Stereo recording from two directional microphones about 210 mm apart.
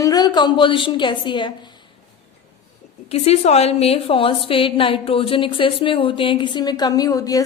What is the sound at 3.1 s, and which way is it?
A woman's voice, 30° left (ahead or behind).